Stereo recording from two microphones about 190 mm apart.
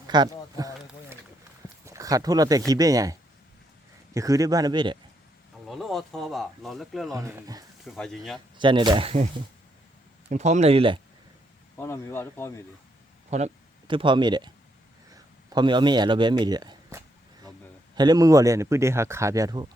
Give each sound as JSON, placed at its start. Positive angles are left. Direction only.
{"t": 0.1, "sound": "a sound", "side_deg": -20}
{"t": 1.8, "sound": "speech", "side_deg": -15}
{"t": 5.6, "sound": "speech", "side_deg": 0}
{"t": 7.1, "sound": "speech", "side_deg": -15}
{"t": 7.9, "sound": "speech", "side_deg": 0}
{"t": 8.5, "sound": "speech", "side_deg": -25}
{"t": 11.8, "sound": "speech", "side_deg": 15}
{"t": 13.3, "sound": "speech", "side_deg": -35}
{"t": 13.8, "sound": "speech", "side_deg": -25}